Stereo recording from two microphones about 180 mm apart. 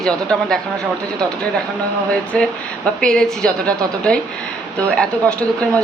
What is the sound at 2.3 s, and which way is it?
A woman's voice, 5° left (ahead or behind).